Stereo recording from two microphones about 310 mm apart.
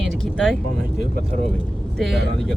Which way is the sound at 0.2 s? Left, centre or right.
Centre.